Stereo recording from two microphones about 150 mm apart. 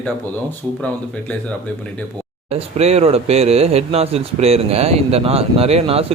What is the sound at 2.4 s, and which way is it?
Speech, 45° right (ahead or behind).